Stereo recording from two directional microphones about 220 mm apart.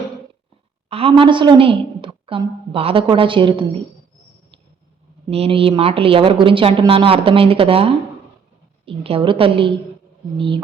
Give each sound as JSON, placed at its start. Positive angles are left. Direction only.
{"t": 0.9, "sound": "a woman's voice", "side_deg": -25}
{"t": 5.3, "sound": "a woman's voice", "side_deg": -25}